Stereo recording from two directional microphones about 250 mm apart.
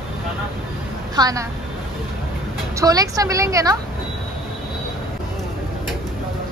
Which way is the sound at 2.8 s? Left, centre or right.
Centre.